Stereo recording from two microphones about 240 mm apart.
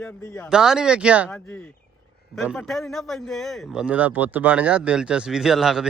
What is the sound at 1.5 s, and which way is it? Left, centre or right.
A man's voice, centre.